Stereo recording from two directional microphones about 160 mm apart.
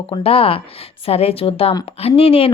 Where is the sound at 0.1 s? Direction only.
35° left (ahead or behind).